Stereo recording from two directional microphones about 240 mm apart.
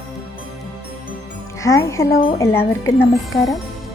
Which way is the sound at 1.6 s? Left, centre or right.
Centre.